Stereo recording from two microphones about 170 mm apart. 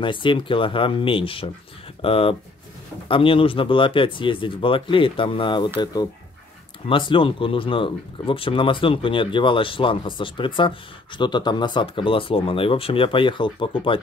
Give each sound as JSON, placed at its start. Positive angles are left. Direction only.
{"t": 0.0, "sound": "speech", "side_deg": 30}
{"t": 6.9, "sound": "speech", "side_deg": 30}